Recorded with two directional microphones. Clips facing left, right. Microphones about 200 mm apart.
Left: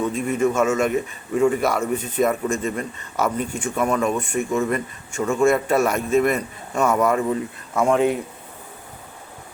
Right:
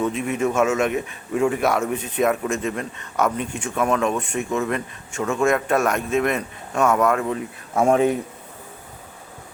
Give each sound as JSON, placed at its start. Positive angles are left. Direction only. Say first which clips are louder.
{"t": 0.1, "sound": "speech", "louder": "left 2 dB", "side_deg": -5}
{"t": 7.7, "sound": "speech", "louder": "right 1 dB", "side_deg": -35}